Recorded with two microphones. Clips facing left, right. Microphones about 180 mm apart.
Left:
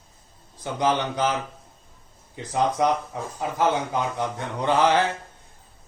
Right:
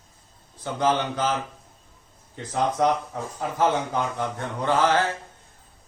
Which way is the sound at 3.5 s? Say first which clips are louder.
Even; 15° left (ahead or behind).